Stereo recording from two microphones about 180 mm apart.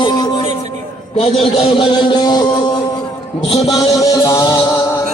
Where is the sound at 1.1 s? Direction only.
35° left (ahead or behind).